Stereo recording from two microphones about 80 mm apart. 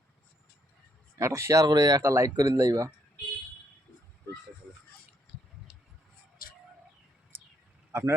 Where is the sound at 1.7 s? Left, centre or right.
Right.